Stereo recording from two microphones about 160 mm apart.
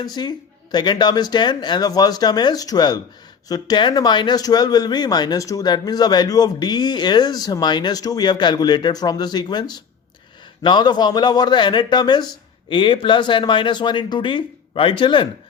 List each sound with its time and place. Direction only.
0.2 s speech: 25° left (ahead or behind)